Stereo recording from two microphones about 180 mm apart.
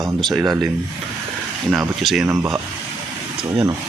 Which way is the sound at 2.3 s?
20° right (ahead or behind).